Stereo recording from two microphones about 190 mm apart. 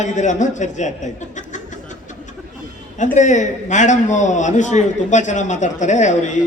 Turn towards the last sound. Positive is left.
turn(degrees=40)  # may be behind; listen again after turning